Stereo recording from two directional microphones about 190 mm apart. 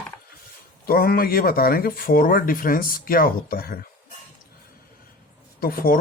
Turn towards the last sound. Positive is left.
turn(degrees=50)  # may be behind; listen again after turning